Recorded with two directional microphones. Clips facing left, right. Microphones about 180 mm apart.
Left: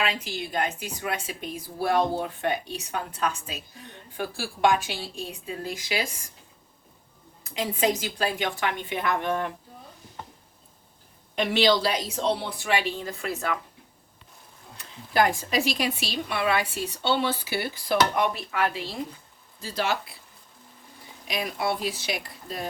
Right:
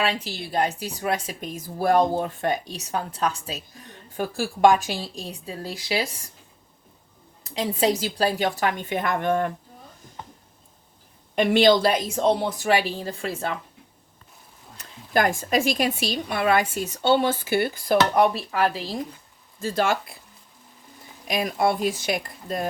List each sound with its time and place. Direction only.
0.0 s a woman's voice: 35° right (ahead or behind)
7.6 s a woman's voice: 35° right (ahead or behind)
11.3 s speech: 50° right (ahead or behind); by 13.6 s 30° right (ahead or behind)
14.8 s speech: 45° right (ahead or behind)
18.2 s a woman's voice: 35° right (ahead or behind)
19.5 s speech: 50° right (ahead or behind)
21.2 s speech: 50° right (ahead or behind)